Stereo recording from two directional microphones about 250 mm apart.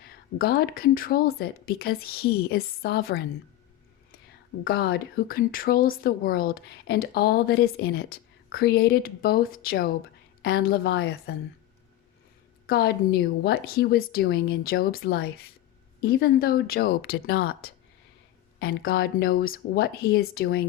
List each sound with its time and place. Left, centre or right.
0.0 s a woman's voice: left
4.6 s a woman's voice: left
12.6 s a woman's voice: left